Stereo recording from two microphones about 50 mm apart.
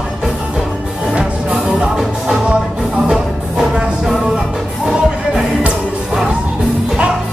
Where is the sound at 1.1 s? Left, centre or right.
Centre.